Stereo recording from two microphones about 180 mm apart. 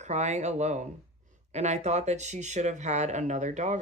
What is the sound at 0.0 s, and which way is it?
Speech, 40° right (ahead or behind).